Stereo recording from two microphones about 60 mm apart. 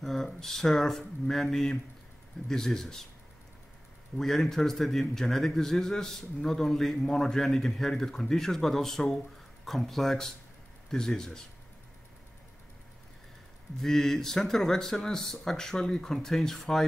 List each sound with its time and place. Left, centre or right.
0.0 s a man's voice: centre
4.2 s a man's voice: centre
13.7 s a man's voice: centre